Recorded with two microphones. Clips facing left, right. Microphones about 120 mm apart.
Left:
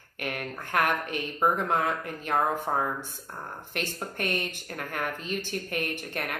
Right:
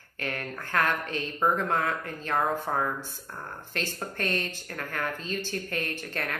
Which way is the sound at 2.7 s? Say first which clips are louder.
Left 1 dB; 30° left (ahead or behind).